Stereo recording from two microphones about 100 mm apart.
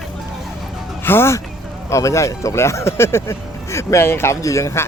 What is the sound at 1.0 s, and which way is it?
Speech, 25° left (ahead or behind).